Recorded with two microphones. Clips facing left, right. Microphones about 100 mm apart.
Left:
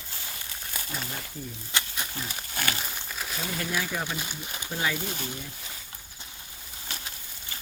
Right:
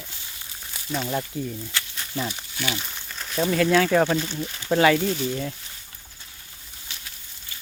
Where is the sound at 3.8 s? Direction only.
65° right (ahead or behind).